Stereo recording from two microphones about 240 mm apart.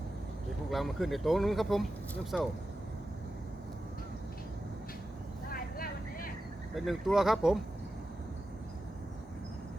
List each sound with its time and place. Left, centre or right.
0.7 s speech: centre
5.5 s vehicle: left
6.7 s speech: centre